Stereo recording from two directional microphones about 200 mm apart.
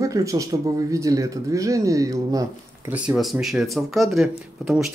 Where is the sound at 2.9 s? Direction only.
5° right (ahead or behind).